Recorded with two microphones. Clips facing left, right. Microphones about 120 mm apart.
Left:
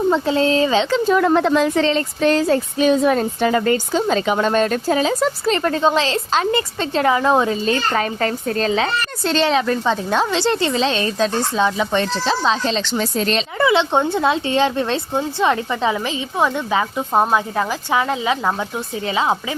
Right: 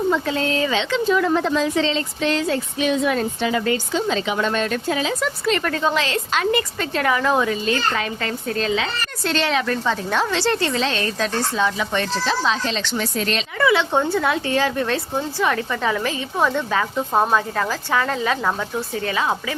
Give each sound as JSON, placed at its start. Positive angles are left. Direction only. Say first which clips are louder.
{"t": 0.1, "sound": "a woman's voice", "louder": "left 5 dB", "side_deg": 30}